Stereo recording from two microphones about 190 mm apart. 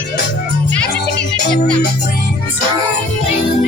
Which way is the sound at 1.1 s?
60° left (ahead or behind).